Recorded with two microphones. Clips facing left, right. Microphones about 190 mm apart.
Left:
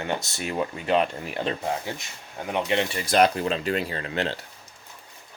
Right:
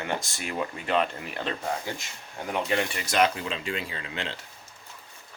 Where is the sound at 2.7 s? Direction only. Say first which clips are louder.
Left 3 dB; 25° left (ahead or behind).